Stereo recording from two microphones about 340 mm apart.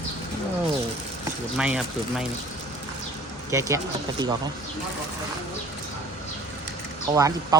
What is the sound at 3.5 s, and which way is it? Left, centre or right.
Speech, centre.